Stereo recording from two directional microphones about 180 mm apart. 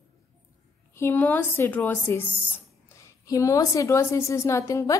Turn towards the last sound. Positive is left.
turn(degrees=20)  # may be behind; listen again after turning